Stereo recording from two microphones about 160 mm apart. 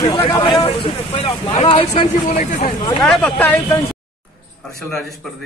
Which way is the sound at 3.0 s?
5° left (ahead or behind).